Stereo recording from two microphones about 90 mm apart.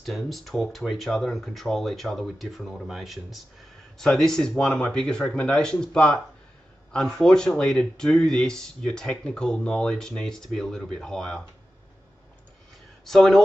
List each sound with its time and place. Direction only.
0.0 s speech: centre (ahead or behind)
13.0 s speech: 5° left (ahead or behind)